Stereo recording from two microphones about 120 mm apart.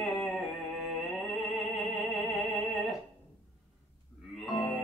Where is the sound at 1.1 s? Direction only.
Centre (ahead or behind).